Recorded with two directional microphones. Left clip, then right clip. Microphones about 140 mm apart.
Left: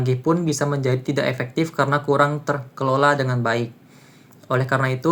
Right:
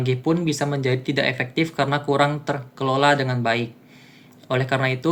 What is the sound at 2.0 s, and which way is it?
Speech, 15° right (ahead or behind).